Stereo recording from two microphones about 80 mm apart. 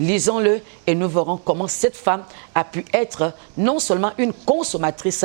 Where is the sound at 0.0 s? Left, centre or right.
Centre.